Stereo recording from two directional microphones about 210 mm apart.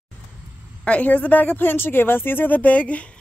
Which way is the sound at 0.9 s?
5° left (ahead or behind).